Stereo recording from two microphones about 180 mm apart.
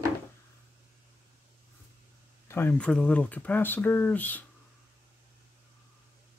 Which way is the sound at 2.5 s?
10° left (ahead or behind).